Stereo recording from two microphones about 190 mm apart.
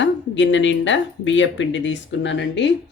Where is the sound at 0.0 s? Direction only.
70° left (ahead or behind).